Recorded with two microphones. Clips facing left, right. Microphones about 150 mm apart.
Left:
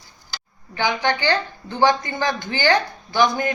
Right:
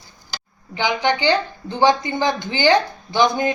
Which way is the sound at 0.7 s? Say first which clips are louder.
Right 2 dB; 15° right (ahead or behind).